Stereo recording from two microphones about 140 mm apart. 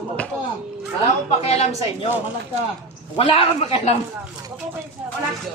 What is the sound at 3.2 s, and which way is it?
Speech, 40° left (ahead or behind).